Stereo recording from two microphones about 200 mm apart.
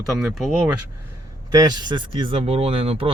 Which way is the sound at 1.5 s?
20° right (ahead or behind).